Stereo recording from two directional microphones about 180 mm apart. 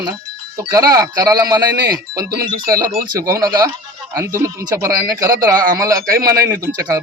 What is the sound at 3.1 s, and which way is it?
Speech, 20° right (ahead or behind).